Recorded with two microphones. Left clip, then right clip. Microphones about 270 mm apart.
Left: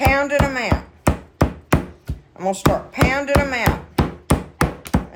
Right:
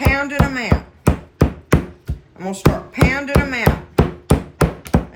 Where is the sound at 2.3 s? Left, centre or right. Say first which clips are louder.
Left 6 dB; centre.